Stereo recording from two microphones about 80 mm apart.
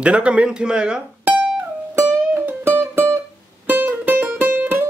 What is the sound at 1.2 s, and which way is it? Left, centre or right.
Music, right.